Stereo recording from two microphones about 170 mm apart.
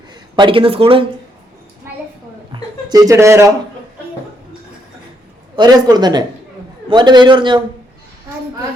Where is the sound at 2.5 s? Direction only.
20° right (ahead or behind).